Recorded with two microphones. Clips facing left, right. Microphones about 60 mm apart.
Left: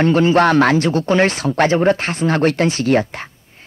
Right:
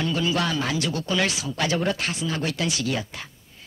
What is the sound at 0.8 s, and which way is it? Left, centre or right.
Speech, left.